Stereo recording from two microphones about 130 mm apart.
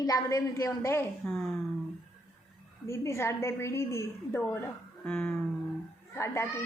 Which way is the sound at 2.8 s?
20° left (ahead or behind).